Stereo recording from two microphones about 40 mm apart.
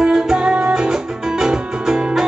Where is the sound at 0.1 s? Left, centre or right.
Centre.